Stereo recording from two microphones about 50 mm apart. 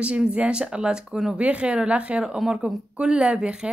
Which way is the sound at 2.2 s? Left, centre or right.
Centre.